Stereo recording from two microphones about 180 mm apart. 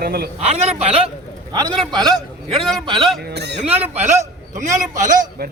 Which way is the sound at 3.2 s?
65° right (ahead or behind).